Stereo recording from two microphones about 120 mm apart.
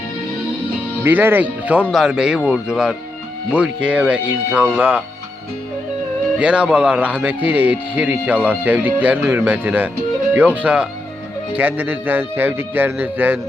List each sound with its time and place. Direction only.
1.0 s a man's voice: 15° right (ahead or behind)
6.4 s a man's voice: 10° right (ahead or behind)